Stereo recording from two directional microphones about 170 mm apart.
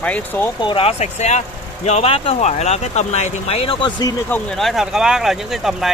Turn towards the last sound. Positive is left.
turn(degrees=0)  # may be behind; listen again after turning